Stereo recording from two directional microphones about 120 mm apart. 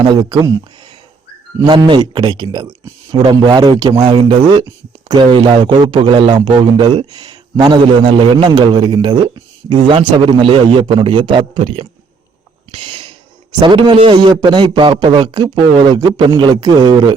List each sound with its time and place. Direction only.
0.0 s a man's voice: 35° right (ahead or behind)
12.7 s a sound: 40° right (ahead or behind)
13.6 s a man's voice: 40° right (ahead or behind)